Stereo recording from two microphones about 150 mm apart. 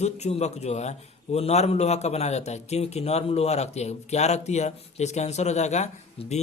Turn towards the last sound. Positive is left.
turn(degrees=50)  # may be behind; listen again after turning